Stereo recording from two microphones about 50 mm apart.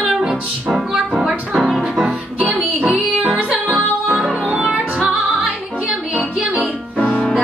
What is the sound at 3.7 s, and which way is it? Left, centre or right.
Music, centre.